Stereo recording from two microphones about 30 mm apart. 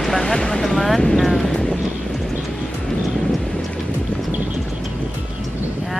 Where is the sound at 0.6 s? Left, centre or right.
Centre.